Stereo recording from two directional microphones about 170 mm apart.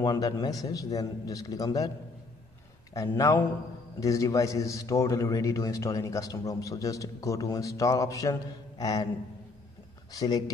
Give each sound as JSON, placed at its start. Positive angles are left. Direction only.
{"t": 0.0, "sound": "a man's voice", "side_deg": 25}
{"t": 2.9, "sound": "a man's voice", "side_deg": 20}
{"t": 10.1, "sound": "a man's voice", "side_deg": 20}